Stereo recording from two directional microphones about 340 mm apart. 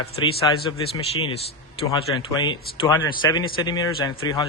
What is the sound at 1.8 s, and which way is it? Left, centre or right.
A man's voice, centre.